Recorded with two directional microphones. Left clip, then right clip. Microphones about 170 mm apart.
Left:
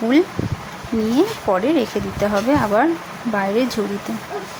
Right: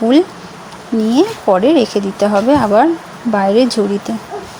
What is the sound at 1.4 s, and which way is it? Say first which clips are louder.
Speech: right 7 dB; 20° right (ahead or behind).